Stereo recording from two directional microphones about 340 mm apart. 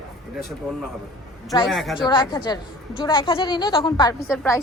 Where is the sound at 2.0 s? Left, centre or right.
Centre.